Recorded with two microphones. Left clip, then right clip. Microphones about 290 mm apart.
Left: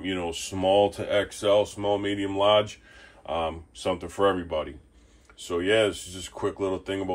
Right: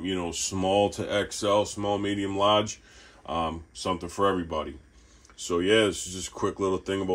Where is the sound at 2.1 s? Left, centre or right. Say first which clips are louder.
Left 2 dB; right.